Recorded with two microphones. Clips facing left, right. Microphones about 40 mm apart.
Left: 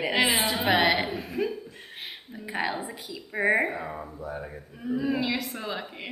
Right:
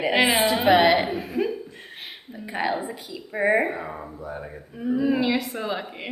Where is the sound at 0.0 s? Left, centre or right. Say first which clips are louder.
Right 4 dB; centre.